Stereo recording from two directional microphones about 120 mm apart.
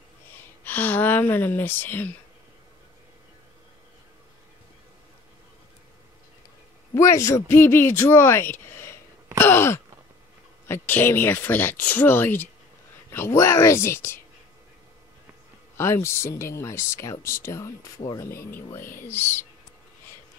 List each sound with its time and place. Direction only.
0.4 s speech: 15° left (ahead or behind)
6.9 s speech: 25° left (ahead or behind)
15.7 s speech: 20° left (ahead or behind)